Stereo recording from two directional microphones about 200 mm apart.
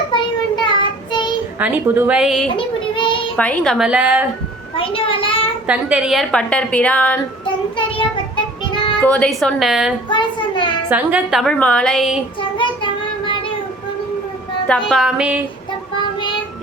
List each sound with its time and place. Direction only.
0.1 s child singing: 20° left (ahead or behind)
1.5 s a woman's voice: 10° right (ahead or behind)
2.6 s child singing: 25° left (ahead or behind)
3.3 s a woman's voice: 5° left (ahead or behind)
4.8 s a child's voice: 25° left (ahead or behind)
5.6 s a woman's voice: 5° right (ahead or behind)
7.8 s child singing: 25° left (ahead or behind)
9.0 s a woman's voice: 5° left (ahead or behind)
10.1 s child singing: 25° left (ahead or behind)
10.8 s a woman's voice: 10° right (ahead or behind)
12.4 s child singing: 25° left (ahead or behind)
14.7 s a woman's voice: centre (ahead or behind)